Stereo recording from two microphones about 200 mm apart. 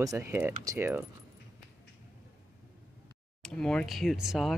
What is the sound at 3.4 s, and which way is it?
Speech, 5° left (ahead or behind).